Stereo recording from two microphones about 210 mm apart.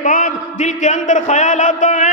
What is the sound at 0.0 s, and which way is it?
Speech, 40° left (ahead or behind).